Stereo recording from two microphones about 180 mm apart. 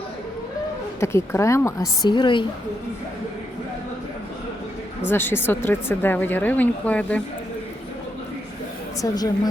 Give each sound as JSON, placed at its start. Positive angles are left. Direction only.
{"t": 0.9, "sound": "speech", "side_deg": 15}
{"t": 5.0, "sound": "speech", "side_deg": 10}
{"t": 9.0, "sound": "speech", "side_deg": 20}